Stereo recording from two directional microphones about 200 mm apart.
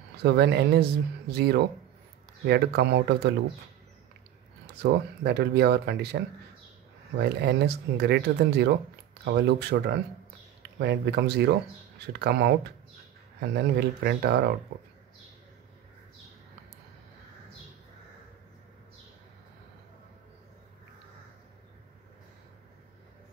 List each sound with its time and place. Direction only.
0.2 s speech: 55° right (ahead or behind)
4.8 s speech: 55° right (ahead or behind)